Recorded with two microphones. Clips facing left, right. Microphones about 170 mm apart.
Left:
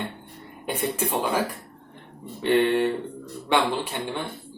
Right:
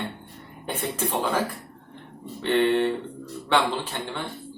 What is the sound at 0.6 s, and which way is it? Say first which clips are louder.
Speech: left 2 dB; 15° left (ahead or behind).